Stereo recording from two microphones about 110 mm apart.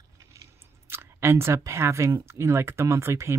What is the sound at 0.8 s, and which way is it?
Speech, 20° right (ahead or behind).